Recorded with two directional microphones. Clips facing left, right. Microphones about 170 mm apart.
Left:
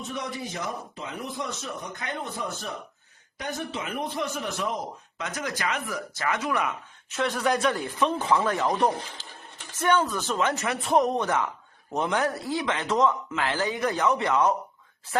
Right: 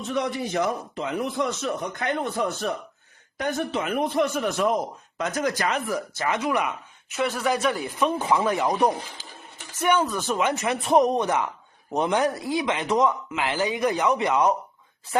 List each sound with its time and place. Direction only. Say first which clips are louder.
0.1 s a man's voice: right 9 dB; 65° right (ahead or behind)
3.3 s a man's voice: right 6 dB; 55° right (ahead or behind); by 6.7 s 15° right (ahead or behind)
7.2 s speech: right 1 dB; 5° right (ahead or behind)